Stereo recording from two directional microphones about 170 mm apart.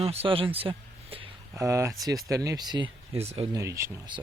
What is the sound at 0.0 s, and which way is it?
Speech, 35° right (ahead or behind).